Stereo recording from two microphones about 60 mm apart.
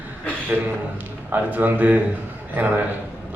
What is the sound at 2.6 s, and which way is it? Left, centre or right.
Speech, right.